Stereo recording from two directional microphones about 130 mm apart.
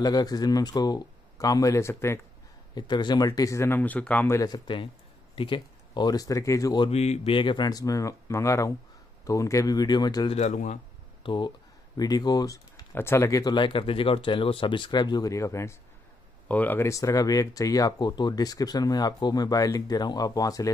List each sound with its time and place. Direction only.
0.0 s speech: 30° left (ahead or behind)
2.7 s speech: 35° left (ahead or behind); by 4.4 s 10° left (ahead or behind)
4.4 s speech: 35° left (ahead or behind)
6.9 s speech: 55° left (ahead or behind)
7.3 s speech: 35° left (ahead or behind)
10.3 s speech: 65° left (ahead or behind)
11.2 s speech: 40° left (ahead or behind)